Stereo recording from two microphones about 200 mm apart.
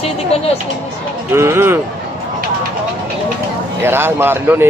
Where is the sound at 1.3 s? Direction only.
10° right (ahead or behind).